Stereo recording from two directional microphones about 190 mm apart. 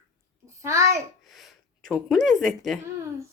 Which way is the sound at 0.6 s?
15° right (ahead or behind).